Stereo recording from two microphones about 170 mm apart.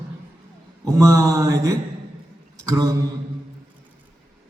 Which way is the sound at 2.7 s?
20° right (ahead or behind).